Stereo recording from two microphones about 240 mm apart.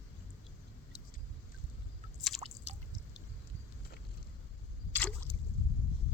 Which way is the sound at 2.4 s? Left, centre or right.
Right.